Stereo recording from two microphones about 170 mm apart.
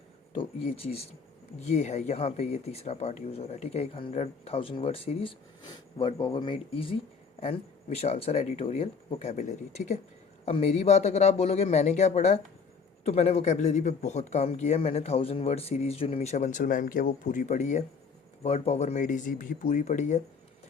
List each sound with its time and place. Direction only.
0.3 s speech: 35° left (ahead or behind)